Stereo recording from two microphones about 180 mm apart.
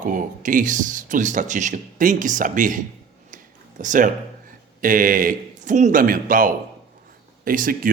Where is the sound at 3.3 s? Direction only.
45° right (ahead or behind).